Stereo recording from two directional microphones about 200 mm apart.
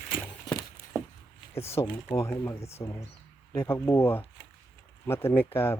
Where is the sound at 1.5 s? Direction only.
10° left (ahead or behind).